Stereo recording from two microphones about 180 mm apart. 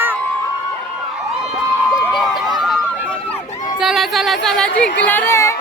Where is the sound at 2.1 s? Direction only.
Centre (ahead or behind).